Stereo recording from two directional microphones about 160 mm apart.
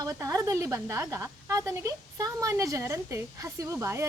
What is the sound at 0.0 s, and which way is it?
A woman's voice, 20° right (ahead or behind).